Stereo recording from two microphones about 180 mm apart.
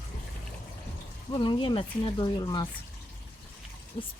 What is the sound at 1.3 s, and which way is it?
Speech, 25° left (ahead or behind).